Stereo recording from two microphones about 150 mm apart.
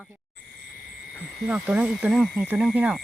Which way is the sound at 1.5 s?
10° right (ahead or behind).